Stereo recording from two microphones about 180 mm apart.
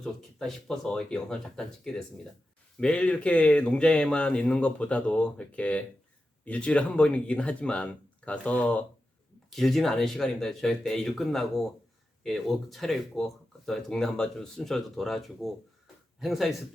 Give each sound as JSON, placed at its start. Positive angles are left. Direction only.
{"t": 0.0, "sound": "speech", "side_deg": 5}